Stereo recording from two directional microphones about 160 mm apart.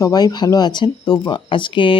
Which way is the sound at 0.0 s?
25° left (ahead or behind).